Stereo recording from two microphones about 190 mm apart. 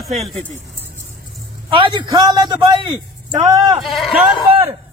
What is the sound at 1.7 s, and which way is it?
A man's voice, 25° right (ahead or behind).